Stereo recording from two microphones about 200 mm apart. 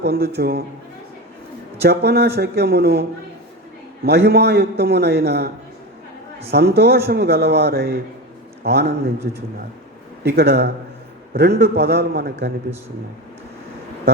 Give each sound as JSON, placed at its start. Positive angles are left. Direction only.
{"t": 0.0, "sound": "speech", "side_deg": -55}
{"t": 1.8, "sound": "a man's voice", "side_deg": -55}
{"t": 6.5, "sound": "a man's voice", "side_deg": -55}